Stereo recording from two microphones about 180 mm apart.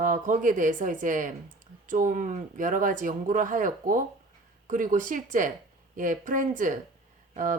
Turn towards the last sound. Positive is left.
turn(degrees=-45)  # may be behind; listen again after turning